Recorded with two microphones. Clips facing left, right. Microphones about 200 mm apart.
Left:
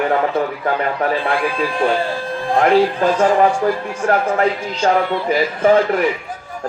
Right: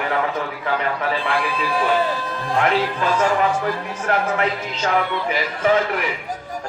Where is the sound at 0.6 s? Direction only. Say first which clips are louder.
Left 4 dB; 45° left (ahead or behind).